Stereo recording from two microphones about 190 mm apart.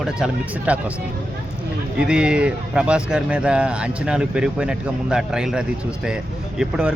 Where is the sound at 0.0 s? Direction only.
5° right (ahead or behind).